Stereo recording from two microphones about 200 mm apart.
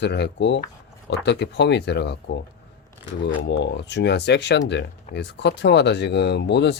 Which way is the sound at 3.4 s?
60° left (ahead or behind).